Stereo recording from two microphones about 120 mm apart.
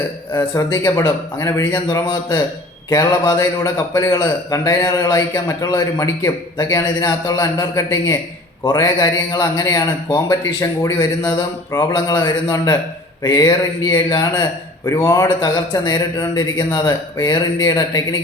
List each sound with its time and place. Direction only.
0.3 s a man's voice: 30° left (ahead or behind)